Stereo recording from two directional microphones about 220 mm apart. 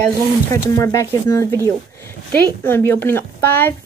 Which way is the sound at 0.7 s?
10° left (ahead or behind).